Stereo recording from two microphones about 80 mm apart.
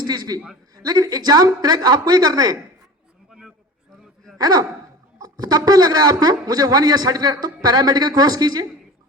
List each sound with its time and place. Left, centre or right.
0.0 s a man's voice: right
3.2 s a sound: centre
4.4 s a man's voice: right